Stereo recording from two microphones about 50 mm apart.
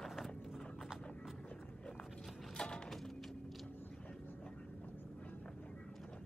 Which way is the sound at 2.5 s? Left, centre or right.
Centre.